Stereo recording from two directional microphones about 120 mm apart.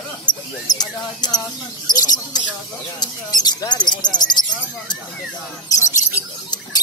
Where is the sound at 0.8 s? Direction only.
35° left (ahead or behind).